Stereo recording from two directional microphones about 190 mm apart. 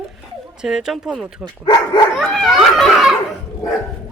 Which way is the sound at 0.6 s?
5° right (ahead or behind).